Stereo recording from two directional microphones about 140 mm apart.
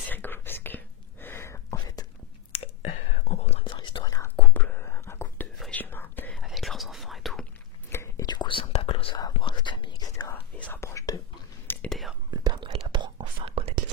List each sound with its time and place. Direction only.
0.1 s whispering: 15° left (ahead or behind)
2.5 s whispering: 45° left (ahead or behind)
3.6 s whispering: 35° left (ahead or behind)
4.4 s whispering: 10° left (ahead or behind)
6.3 s whispering: centre (ahead or behind)
7.9 s whispering: 20° left (ahead or behind)
8.3 s whispering: 35° left (ahead or behind)
10.1 s whispering: 15° left (ahead or behind)
11.9 s whispering: centre (ahead or behind)
12.3 s whispering: 30° right (ahead or behind)